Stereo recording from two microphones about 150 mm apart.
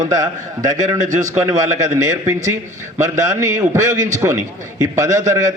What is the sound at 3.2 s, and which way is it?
Speech, 20° right (ahead or behind).